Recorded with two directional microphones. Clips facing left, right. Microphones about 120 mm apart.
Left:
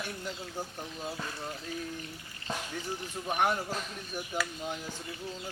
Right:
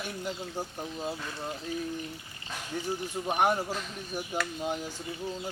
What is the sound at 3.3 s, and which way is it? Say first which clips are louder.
Speech: right 3 dB; 20° right (ahead or behind).